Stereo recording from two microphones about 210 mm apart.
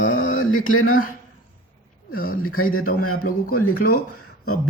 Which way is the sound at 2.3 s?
90° left.